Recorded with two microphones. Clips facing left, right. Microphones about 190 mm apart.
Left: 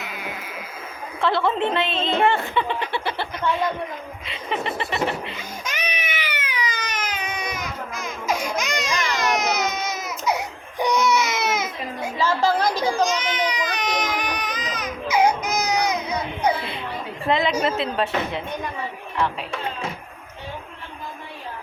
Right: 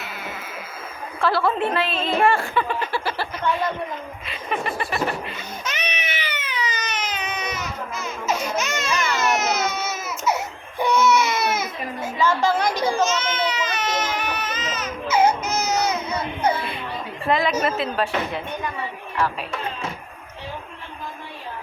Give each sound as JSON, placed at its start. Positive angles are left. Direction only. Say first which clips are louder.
{"t": 0.0, "sound": "sheep", "louder": "left 1 dB", "side_deg": 15}
{"t": 1.2, "sound": "a woman's voice", "louder": "even", "side_deg": 20}
{"t": 4.3, "sound": "a woman's voice", "louder": "even", "side_deg": 25}
{"t": 5.4, "sound": "cat", "louder": "even", "side_deg": 10}
{"t": 9.1, "sound": "baby cry", "louder": "left 1 dB", "side_deg": 15}
{"t": 17.2, "sound": "a woman's voice", "louder": "even", "side_deg": 25}